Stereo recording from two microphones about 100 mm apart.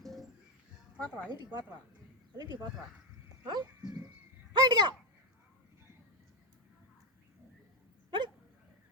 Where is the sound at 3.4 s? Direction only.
45° right (ahead or behind).